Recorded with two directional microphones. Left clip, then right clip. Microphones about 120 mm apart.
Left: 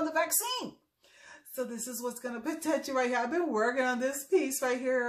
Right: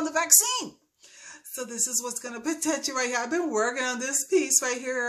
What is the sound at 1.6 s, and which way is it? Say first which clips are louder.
Speech: right 5 dB; 20° right (ahead or behind).